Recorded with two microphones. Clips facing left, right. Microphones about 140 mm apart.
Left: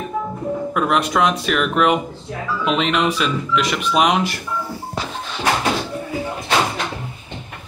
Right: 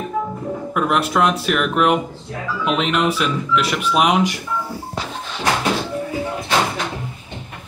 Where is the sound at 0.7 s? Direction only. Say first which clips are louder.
Right 1 dB; 5° right (ahead or behind).